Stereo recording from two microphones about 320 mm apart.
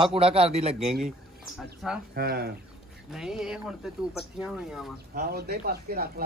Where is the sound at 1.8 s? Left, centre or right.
Centre.